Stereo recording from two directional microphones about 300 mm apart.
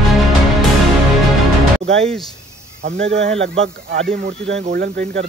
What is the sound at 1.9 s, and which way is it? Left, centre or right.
Speech, centre.